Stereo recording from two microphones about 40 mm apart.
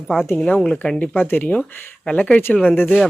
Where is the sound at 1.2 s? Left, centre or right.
Left.